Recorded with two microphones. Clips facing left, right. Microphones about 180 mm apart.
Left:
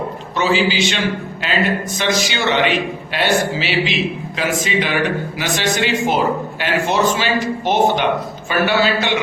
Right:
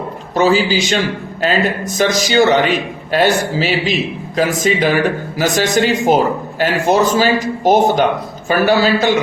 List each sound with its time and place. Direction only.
0.3 s a man's voice: 40° right (ahead or behind)
2.0 s a man's voice: 40° right (ahead or behind)